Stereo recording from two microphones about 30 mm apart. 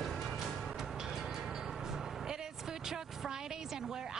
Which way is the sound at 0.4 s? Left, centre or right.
Centre.